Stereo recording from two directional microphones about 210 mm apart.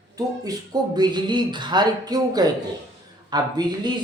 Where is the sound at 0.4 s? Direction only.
20° right (ahead or behind).